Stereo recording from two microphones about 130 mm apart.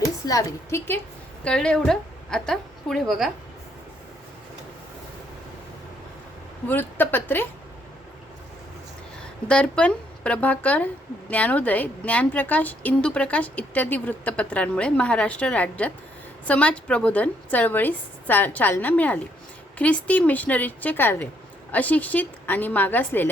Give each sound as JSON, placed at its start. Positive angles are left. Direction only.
{"t": 0.3, "sound": "a woman's voice", "side_deg": 25}
{"t": 1.5, "sound": "a woman's voice", "side_deg": 5}
{"t": 6.7, "sound": "a woman's voice", "side_deg": 15}
{"t": 9.5, "sound": "a woman's voice", "side_deg": 10}